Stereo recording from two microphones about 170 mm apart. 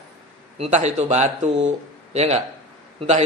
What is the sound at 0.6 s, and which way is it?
A woman's voice, 40° right (ahead or behind).